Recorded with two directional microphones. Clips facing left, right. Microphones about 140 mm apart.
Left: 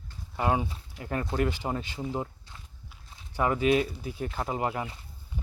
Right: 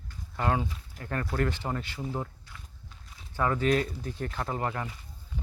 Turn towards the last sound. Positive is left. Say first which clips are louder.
# left 2 dB
turn(degrees=15)  # may be behind; listen again after turning